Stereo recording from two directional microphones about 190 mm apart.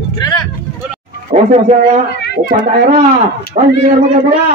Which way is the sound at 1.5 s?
35° right (ahead or behind).